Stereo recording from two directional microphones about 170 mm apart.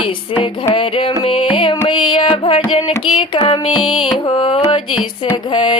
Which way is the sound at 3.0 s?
30° left (ahead or behind).